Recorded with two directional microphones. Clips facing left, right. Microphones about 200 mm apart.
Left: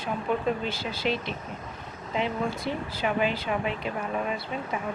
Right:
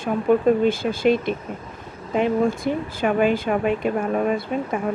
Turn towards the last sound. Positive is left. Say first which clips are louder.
# right 8 dB
turn(degrees=-50)  # may be behind; listen again after turning